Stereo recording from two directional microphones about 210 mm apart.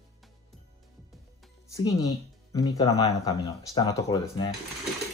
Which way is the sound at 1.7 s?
15° left (ahead or behind).